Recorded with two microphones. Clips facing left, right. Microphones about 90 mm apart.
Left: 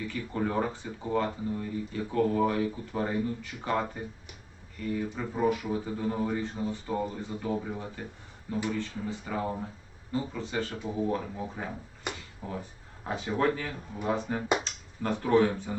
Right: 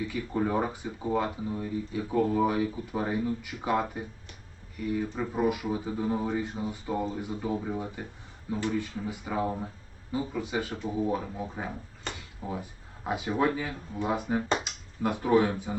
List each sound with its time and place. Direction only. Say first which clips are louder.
0.1 s speech: even; 10° right (ahead or behind)
12.1 s a sound: left 2 dB; 15° left (ahead or behind)
12.4 s speech: right 2 dB; 10° right (ahead or behind)